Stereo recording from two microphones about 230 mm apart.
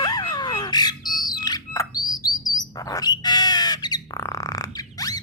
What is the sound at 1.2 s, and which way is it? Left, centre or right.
Chirp, centre.